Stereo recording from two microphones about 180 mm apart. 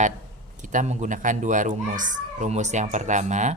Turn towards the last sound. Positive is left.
turn(degrees=-40)  # may be behind; listen again after turning